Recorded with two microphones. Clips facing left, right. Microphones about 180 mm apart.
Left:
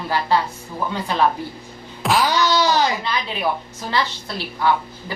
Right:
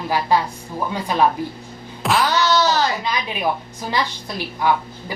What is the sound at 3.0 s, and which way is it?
A woman's voice, 15° right (ahead or behind).